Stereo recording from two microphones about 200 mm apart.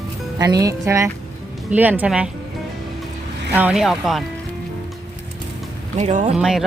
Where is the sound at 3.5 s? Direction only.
10° right (ahead or behind).